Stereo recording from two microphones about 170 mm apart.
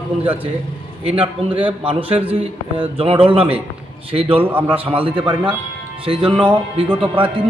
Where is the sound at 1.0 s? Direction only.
30° right (ahead or behind).